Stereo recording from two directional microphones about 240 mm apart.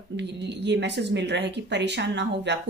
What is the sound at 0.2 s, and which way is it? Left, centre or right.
Speech, right.